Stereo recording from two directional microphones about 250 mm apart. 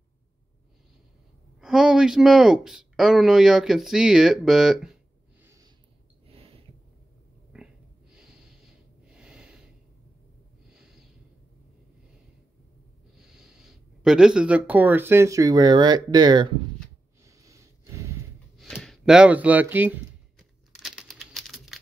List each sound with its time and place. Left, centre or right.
1.6 s speech: centre
5.4 s a sound: centre
6.2 s a sound: right
7.5 s snort: centre
13.3 s speech: centre
17.2 s snort: centre
18.6 s speech: centre
20.8 s typing: centre